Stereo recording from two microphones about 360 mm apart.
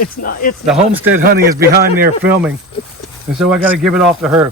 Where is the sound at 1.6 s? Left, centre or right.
Right.